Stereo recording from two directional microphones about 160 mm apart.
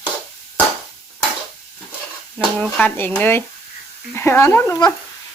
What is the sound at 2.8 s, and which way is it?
Speech, 10° left (ahead or behind).